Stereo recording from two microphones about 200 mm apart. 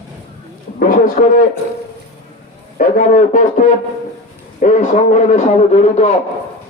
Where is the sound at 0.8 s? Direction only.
45° left (ahead or behind).